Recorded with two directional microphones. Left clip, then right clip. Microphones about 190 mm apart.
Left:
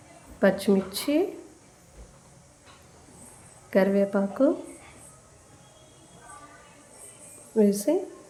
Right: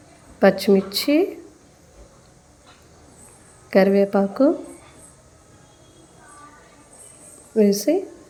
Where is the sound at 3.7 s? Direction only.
20° right (ahead or behind).